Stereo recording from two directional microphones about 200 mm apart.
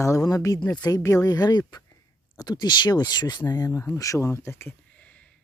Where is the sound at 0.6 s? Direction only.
5° left (ahead or behind).